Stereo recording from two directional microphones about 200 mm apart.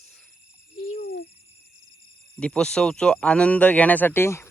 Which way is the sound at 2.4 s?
5° left (ahead or behind).